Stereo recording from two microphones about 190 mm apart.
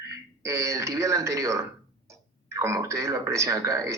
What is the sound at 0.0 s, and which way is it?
A man's voice, 15° right (ahead or behind).